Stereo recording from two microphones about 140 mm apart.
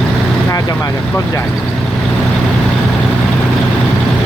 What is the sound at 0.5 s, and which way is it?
Speech, 25° left (ahead or behind).